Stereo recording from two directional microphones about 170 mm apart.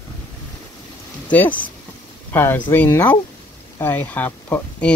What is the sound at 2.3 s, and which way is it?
Speech, 15° left (ahead or behind).